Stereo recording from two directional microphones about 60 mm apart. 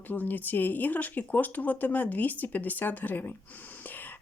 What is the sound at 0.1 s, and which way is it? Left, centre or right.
Speech, left.